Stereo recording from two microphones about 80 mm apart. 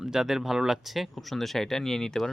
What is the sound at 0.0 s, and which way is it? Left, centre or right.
Speech, centre.